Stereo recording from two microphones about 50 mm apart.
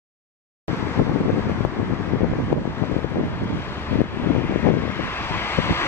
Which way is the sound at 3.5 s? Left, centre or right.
Left.